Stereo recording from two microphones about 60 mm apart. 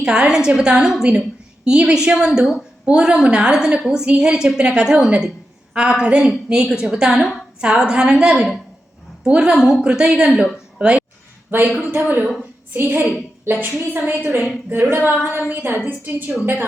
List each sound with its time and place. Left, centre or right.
0.0 s a woman's voice: centre
11.5 s a woman's voice: right